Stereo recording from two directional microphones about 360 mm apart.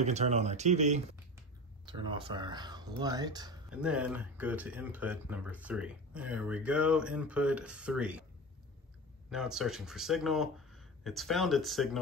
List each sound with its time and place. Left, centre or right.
0.0 s speech: centre
9.3 s speech: centre